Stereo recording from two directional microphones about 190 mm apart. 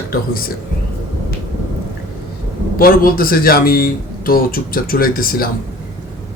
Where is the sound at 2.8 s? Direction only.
50° left (ahead or behind).